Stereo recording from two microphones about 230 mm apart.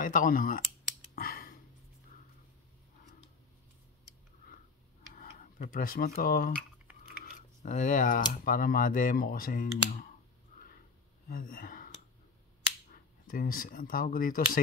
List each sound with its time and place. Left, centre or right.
0.0 s speech: left
1.1 s a sound: left
5.1 s speech: left
11.2 s speech: left
12.9 s speech: left